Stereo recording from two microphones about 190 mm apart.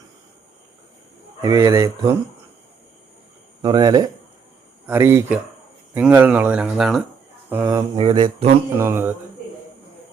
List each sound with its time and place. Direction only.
1.4 s speech: 15° right (ahead or behind)
3.6 s mantra: 20° right (ahead or behind)
4.9 s speech: 15° right (ahead or behind)
7.5 s mantra: 15° right (ahead or behind)
8.8 s speech: 10° right (ahead or behind)